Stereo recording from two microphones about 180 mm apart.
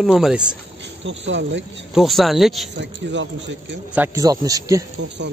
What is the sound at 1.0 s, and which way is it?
Speech, 90° right.